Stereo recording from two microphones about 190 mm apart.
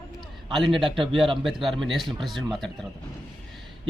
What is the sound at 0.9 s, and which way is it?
Speech, 25° right (ahead or behind).